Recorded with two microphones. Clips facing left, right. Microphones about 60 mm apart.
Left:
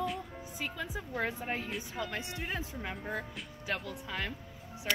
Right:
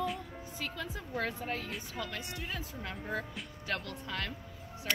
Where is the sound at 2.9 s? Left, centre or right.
Centre.